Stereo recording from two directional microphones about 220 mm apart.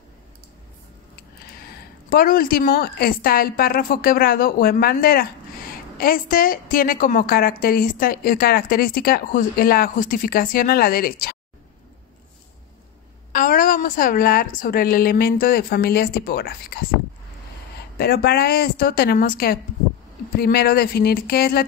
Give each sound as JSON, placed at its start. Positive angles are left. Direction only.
{"t": 2.0, "sound": "a woman's voice", "side_deg": 40}
{"t": 13.3, "sound": "a woman's voice", "side_deg": 40}
{"t": 17.9, "sound": "speech", "side_deg": 45}